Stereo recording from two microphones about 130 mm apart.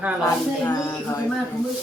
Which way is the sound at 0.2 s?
25° left (ahead or behind).